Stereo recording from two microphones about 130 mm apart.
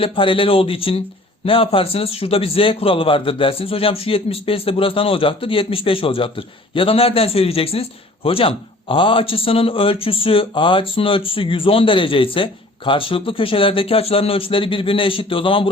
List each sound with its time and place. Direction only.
0.0 s a man's voice: 40° left (ahead or behind)